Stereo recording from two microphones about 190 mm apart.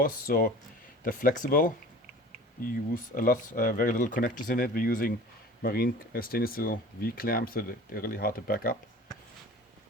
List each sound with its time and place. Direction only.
0.0 s speech: 50° left (ahead or behind)